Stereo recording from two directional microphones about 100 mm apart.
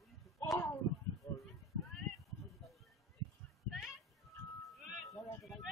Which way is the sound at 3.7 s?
5° right (ahead or behind).